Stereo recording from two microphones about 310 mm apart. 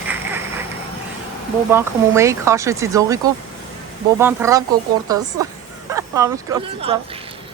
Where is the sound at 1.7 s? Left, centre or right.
Centre.